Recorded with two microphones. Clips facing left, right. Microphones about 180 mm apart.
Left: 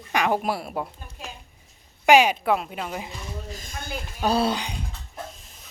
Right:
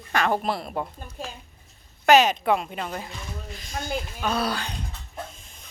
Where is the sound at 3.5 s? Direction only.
50° left (ahead or behind).